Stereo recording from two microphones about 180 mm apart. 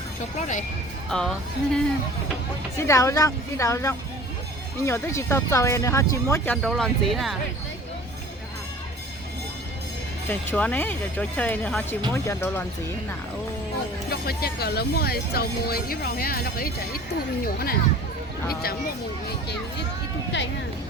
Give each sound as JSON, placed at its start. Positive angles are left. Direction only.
{"t": 0.3, "sound": "speech", "side_deg": 40}
{"t": 1.1, "sound": "speech", "side_deg": 5}
{"t": 2.7, "sound": "speech", "side_deg": 15}
{"t": 6.6, "sound": "speech", "side_deg": 0}
{"t": 10.2, "sound": "speech", "side_deg": 10}
{"t": 14.1, "sound": "speech", "side_deg": 60}